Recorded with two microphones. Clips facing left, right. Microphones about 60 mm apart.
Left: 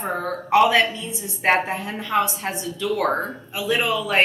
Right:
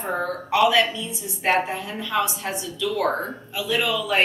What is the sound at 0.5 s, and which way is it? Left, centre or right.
A woman's voice, left.